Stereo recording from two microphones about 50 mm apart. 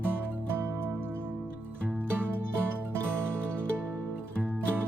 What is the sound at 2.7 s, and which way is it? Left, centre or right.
Music, right.